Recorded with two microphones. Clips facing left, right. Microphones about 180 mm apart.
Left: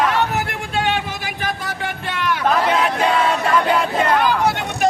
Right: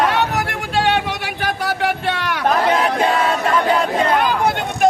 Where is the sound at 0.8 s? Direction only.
70° right (ahead or behind).